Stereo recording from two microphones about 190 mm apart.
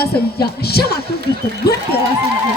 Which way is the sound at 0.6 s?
55° left (ahead or behind).